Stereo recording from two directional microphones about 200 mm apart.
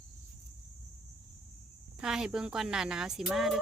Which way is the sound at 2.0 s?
5° right (ahead or behind).